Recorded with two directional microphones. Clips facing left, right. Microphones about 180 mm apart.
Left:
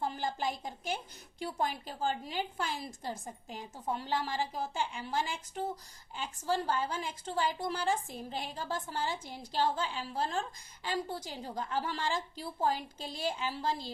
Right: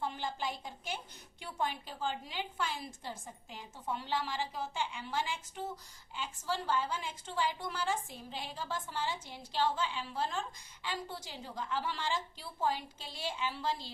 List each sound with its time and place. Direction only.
0.0 s a woman's voice: 40° left (ahead or behind)